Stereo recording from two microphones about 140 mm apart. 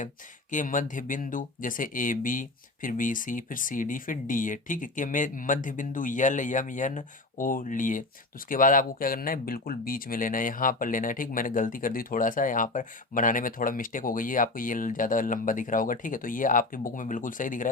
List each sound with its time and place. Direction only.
0.5 s speech: 70° left (ahead or behind)